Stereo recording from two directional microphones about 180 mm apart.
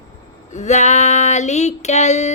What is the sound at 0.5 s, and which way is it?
Female singing, 40° left (ahead or behind).